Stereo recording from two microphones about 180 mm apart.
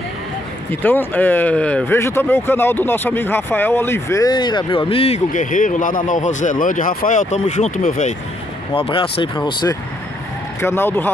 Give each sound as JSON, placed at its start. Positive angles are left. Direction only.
{"t": 0.7, "sound": "speech", "side_deg": 10}
{"t": 8.7, "sound": "speech", "side_deg": 30}
{"t": 10.6, "sound": "speech", "side_deg": 15}